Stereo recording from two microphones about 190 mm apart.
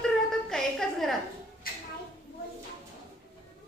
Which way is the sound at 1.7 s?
50° left (ahead or behind).